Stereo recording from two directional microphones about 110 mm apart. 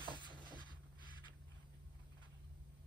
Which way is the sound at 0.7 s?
45° left (ahead or behind).